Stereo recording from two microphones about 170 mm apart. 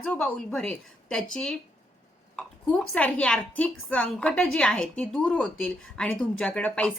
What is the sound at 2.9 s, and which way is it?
A woman's voice, 10° left (ahead or behind).